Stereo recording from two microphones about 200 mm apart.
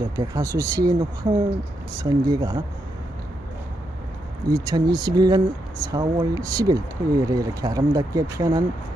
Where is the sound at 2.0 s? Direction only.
20° right (ahead or behind).